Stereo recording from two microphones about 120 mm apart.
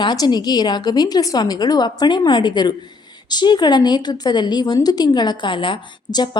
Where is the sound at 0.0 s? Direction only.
35° left (ahead or behind).